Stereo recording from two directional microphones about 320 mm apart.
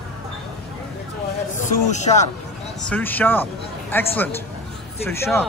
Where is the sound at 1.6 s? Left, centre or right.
Left.